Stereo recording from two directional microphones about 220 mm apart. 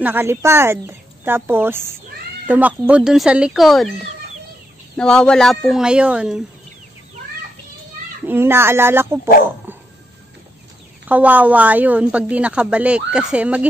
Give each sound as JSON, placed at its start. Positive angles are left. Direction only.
{"t": 0.0, "sound": "a woman's voice", "side_deg": -10}
{"t": 4.9, "sound": "a woman's voice", "side_deg": 5}
{"t": 8.3, "sound": "speech", "side_deg": -10}
{"t": 11.1, "sound": "a woman's voice", "side_deg": -5}